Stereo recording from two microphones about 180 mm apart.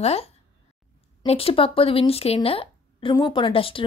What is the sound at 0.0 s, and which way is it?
Speech, 35° left (ahead or behind).